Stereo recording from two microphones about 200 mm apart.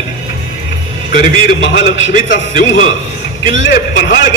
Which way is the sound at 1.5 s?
65° left (ahead or behind).